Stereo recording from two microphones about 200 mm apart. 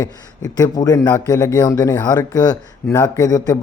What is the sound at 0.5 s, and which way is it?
A man's voice, 20° left (ahead or behind).